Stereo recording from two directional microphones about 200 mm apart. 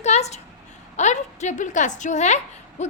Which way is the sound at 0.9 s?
35° left (ahead or behind).